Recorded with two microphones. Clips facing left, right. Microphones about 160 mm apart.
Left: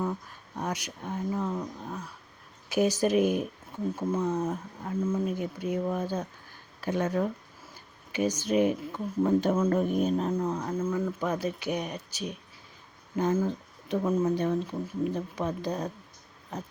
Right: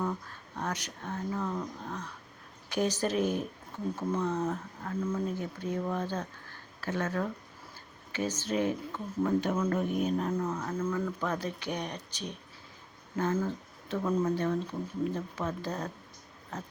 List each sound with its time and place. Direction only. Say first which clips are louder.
0.0 s speech: left 2 dB; 10° left (ahead or behind)
9.2 s speech: left 4 dB; 30° left (ahead or behind)
10.2 s speech: left 3 dB; 20° left (ahead or behind)
11.2 s speech: left 3 dB; 10° left (ahead or behind)